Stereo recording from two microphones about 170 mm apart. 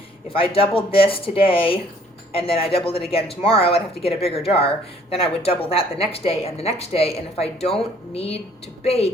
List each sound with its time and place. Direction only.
0.3 s speech: 35° left (ahead or behind)